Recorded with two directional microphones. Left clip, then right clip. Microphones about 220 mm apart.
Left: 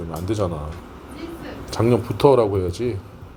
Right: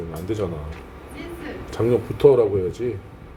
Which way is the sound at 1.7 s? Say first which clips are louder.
Left 1 dB; 25° left (ahead or behind).